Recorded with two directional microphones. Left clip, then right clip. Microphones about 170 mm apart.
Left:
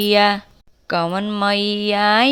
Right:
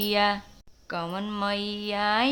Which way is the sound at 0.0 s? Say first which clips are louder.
Left 9 dB; 40° left (ahead or behind).